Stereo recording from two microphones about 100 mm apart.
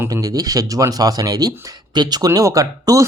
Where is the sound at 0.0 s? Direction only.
35° right (ahead or behind).